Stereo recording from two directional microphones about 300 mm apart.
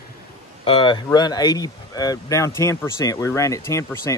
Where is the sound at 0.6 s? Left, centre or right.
Centre.